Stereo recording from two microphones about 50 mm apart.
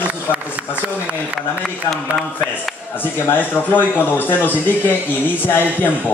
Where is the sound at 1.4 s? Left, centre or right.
Centre.